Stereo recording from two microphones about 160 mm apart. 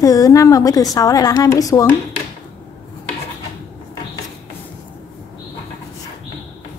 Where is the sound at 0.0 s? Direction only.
20° left (ahead or behind).